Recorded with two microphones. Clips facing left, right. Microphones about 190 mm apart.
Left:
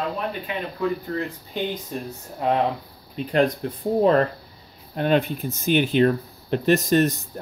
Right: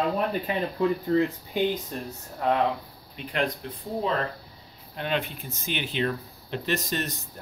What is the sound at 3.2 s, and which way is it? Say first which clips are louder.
Speech: left 8 dB; 40° left (ahead or behind).